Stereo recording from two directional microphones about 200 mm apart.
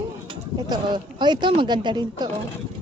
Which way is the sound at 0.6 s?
20° right (ahead or behind).